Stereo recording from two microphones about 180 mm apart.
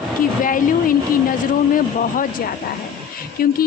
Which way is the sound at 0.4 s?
50° left (ahead or behind).